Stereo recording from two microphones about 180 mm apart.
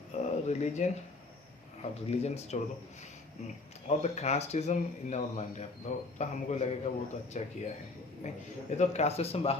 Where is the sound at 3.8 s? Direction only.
40° left (ahead or behind).